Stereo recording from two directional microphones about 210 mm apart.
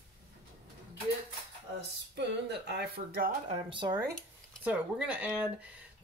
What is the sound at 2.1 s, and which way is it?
Speech, 55° right (ahead or behind).